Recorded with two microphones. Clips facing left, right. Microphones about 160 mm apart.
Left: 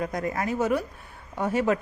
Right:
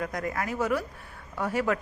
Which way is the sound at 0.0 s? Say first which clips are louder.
Left 3 dB; 25° left (ahead or behind).